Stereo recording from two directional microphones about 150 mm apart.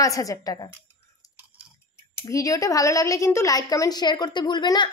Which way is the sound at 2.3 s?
20° left (ahead or behind).